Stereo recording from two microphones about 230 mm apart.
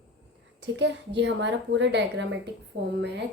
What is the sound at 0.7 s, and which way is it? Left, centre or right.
Speech, right.